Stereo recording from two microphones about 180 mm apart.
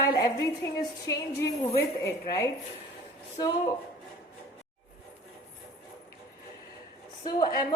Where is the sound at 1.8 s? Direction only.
15° left (ahead or behind).